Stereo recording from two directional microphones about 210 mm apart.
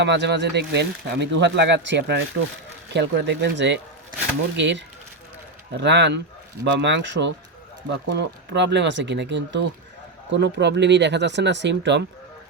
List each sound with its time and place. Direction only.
0.0 s speech: 55° right (ahead or behind)